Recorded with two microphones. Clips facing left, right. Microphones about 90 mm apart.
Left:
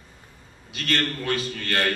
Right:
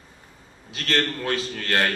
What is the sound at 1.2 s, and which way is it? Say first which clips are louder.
Speech: even; 35° right (ahead or behind).